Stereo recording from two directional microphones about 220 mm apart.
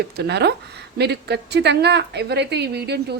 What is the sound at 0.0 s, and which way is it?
Speech, 50° right (ahead or behind).